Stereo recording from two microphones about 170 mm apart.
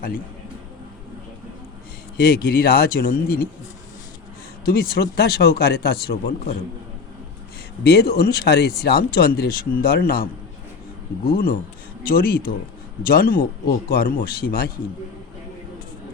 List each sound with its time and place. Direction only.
2.1 s speech: 65° left (ahead or behind)
4.6 s speech: 65° left (ahead or behind)
7.9 s speech: 70° left (ahead or behind)
11.3 s speech: 60° left (ahead or behind)